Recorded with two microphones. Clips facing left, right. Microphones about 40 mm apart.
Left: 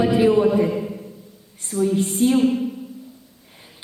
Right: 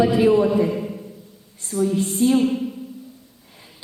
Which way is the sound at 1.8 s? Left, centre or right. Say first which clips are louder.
Even; left.